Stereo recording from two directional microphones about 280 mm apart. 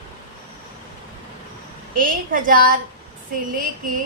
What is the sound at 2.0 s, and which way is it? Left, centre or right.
Speech, right.